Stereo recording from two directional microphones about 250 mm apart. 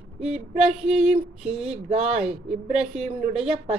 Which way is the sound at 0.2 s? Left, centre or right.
Centre.